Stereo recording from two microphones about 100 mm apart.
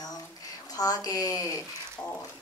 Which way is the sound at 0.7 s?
40° left (ahead or behind).